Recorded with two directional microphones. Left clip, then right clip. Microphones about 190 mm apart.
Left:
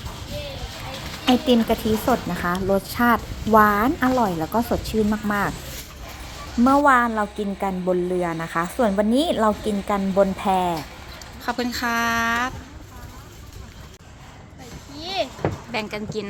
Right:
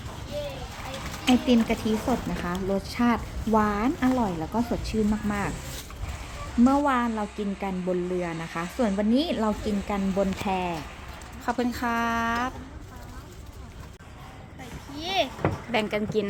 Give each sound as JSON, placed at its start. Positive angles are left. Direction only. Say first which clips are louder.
{"t": 1.2, "sound": "a woman's voice", "louder": "left 4 dB", "side_deg": 10}
{"t": 6.7, "sound": "a woman's voice", "louder": "left 9 dB", "side_deg": 5}
{"t": 11.4, "sound": "a woman's voice", "louder": "left 3 dB", "side_deg": -10}
{"t": 14.9, "sound": "a sound", "louder": "even", "side_deg": -15}
{"t": 15.7, "sound": "speech", "louder": "right 2 dB", "side_deg": -30}